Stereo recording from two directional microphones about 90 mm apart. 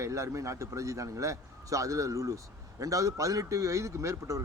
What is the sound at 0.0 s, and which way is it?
Speech, 35° right (ahead or behind).